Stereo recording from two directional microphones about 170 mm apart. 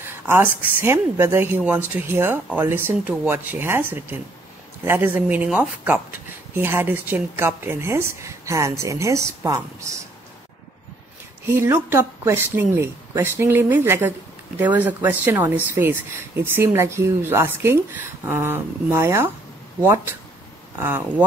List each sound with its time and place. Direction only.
0.0 s speech: 10° right (ahead or behind)
11.4 s speech: 15° right (ahead or behind)